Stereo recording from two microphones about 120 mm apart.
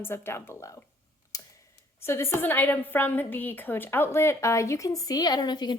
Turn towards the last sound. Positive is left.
turn(degrees=35)  # may be behind; listen again after turning